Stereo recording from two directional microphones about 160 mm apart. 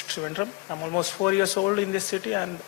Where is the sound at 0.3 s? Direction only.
25° left (ahead or behind); by 2.3 s 10° left (ahead or behind).